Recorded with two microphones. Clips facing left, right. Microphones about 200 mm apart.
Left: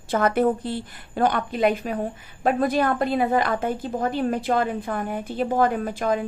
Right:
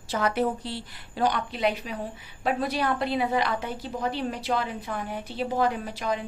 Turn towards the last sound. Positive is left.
turn(degrees=50)  # may be behind; listen again after turning